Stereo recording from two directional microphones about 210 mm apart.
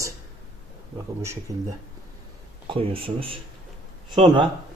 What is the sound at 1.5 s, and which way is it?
Speech, 15° right (ahead or behind).